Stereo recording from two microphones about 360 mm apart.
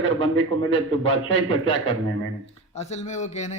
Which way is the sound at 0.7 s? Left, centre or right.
Centre.